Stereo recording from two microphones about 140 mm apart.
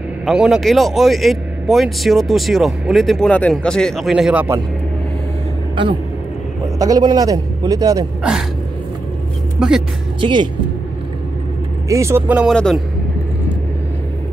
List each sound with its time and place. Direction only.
0.2 s speech: 5° right (ahead or behind)
6.8 s a man's voice: 30° right (ahead or behind)
8.2 s speech: 5° right (ahead or behind)
9.6 s speech: 5° right (ahead or behind)
10.2 s speech: 35° right (ahead or behind)
11.9 s speech: 20° right (ahead or behind)
12.4 s speech: 5° left (ahead or behind)